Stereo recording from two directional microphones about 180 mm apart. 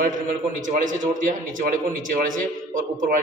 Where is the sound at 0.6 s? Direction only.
45° right (ahead or behind).